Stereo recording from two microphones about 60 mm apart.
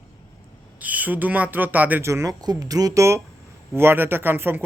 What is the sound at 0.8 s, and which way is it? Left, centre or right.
Speech, right.